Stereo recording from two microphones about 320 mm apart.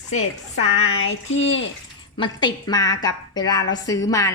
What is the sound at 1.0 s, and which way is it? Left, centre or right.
Speech, left.